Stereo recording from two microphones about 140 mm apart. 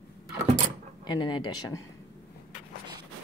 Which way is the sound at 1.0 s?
35° left (ahead or behind).